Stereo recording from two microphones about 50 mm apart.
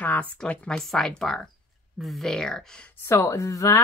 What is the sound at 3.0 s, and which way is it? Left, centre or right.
Speech, left.